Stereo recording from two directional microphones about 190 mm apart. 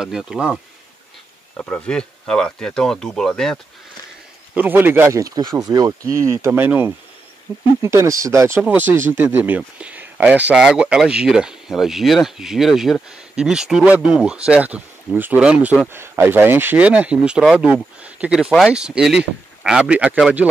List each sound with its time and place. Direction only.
0.0 s speech: centre (ahead or behind)
1.6 s speech: 5° left (ahead or behind)
4.6 s speech: 10° right (ahead or behind)